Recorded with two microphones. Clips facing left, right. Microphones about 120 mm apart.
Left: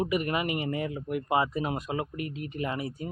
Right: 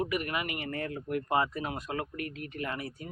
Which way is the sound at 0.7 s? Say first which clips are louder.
Left 3 dB; 10° left (ahead or behind).